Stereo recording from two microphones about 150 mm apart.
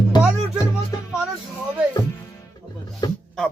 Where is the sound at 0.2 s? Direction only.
5° right (ahead or behind).